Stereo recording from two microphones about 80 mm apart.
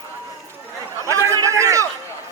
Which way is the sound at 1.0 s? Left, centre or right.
Right.